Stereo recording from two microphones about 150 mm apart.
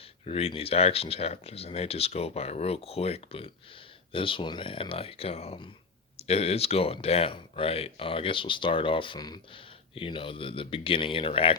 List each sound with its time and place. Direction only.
0.0 s speech: 40° left (ahead or behind)